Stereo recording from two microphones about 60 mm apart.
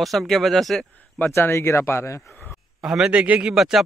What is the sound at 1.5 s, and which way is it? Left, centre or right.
Speech, left.